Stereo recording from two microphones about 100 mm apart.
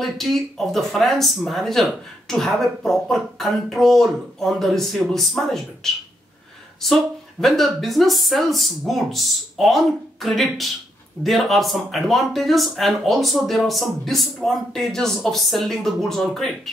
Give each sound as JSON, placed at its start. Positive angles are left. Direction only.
{"t": 0.0, "sound": "speech", "side_deg": 5}